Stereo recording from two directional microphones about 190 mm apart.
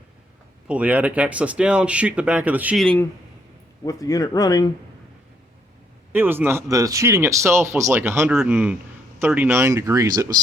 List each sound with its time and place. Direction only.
0.7 s speech: 5° right (ahead or behind)
2.8 s speech: 5° left (ahead or behind)
3.8 s speech: 20° left (ahead or behind)
6.1 s speech: 10° right (ahead or behind)